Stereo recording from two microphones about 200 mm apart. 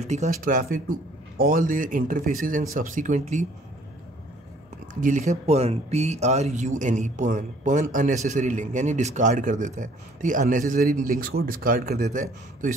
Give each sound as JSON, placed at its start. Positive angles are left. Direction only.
{"t": 0.0, "sound": "speech", "side_deg": -35}
{"t": 5.0, "sound": "speech", "side_deg": -35}